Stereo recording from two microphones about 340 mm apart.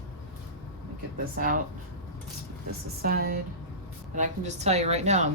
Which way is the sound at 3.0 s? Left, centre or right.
Right.